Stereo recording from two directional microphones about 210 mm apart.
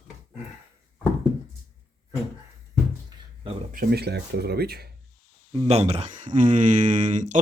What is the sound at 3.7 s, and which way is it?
Speech, 45° right (ahead or behind).